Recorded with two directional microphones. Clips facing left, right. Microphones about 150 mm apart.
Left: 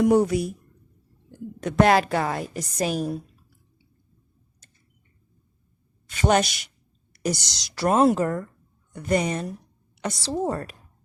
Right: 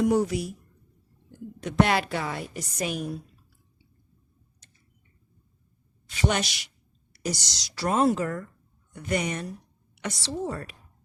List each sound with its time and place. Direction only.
0.0 s speech: 60° left (ahead or behind)
1.6 s a woman's voice: 45° left (ahead or behind)
6.1 s a woman's voice: 50° left (ahead or behind)
7.8 s a woman's voice: 55° left (ahead or behind)